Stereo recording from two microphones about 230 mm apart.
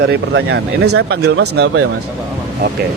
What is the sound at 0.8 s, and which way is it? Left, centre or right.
Speech, right.